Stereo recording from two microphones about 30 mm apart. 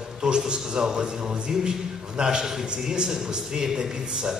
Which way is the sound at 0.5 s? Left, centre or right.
Right.